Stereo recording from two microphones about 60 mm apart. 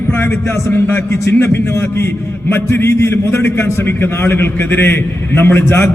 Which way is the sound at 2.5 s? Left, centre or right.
Left.